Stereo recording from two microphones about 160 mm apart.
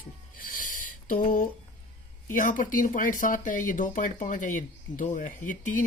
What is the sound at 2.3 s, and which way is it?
Speech, 55° left (ahead or behind).